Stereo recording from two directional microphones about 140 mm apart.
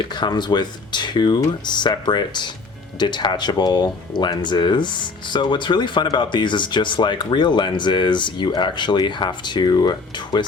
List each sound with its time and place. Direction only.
0.0 s speech: 35° left (ahead or behind)